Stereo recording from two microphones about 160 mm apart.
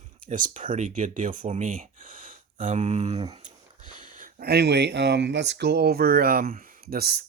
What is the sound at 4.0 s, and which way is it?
Speech, 55° right (ahead or behind).